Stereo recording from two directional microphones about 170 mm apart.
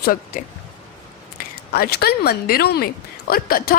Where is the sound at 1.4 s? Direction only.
60° left (ahead or behind).